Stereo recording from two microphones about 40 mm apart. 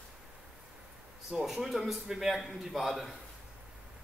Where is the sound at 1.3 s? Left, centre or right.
Centre.